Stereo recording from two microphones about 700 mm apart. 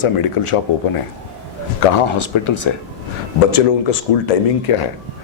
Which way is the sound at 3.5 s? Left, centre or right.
Left.